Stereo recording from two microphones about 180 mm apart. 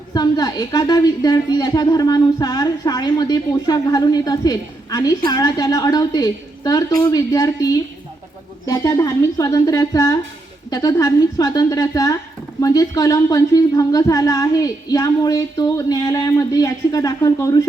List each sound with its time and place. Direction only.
0.1 s speech: 20° left (ahead or behind)